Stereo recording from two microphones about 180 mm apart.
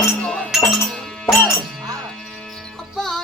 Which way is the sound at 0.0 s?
5° left (ahead or behind).